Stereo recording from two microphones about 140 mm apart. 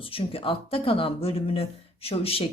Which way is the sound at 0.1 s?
40° left (ahead or behind).